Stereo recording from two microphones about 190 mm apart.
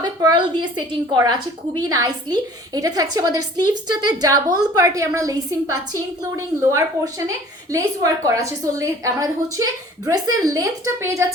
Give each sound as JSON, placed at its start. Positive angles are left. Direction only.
{"t": 0.0, "sound": "a woman's voice", "side_deg": -20}